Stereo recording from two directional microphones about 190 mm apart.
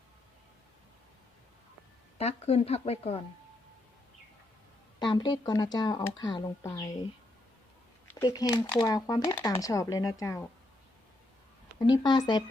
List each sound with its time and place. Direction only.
2.1 s speech: 30° left (ahead or behind)
4.9 s speech: 25° left (ahead or behind)
8.1 s speech: 20° left (ahead or behind)
12.0 s speech: 20° left (ahead or behind)